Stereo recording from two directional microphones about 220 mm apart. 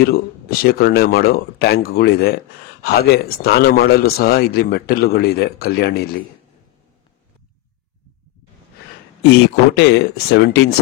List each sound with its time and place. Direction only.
0.0 s speech: 45° left (ahead or behind)
9.3 s speech: 50° left (ahead or behind)